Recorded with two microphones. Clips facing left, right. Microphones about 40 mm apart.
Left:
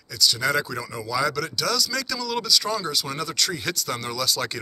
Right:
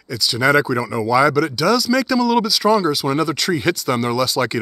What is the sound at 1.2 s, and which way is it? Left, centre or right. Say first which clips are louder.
Speech: right 9 dB; right.